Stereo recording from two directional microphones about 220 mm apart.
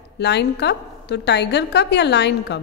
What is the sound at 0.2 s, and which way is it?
A woman's voice, 50° left (ahead or behind).